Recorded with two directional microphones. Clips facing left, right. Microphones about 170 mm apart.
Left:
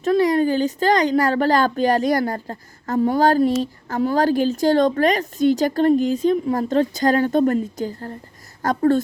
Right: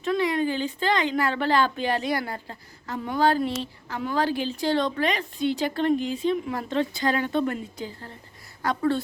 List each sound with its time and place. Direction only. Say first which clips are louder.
0.0 s speech: left 7 dB; 40° left (ahead or behind)